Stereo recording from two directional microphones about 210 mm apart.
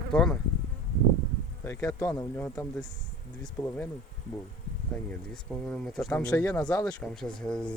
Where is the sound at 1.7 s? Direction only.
15° left (ahead or behind).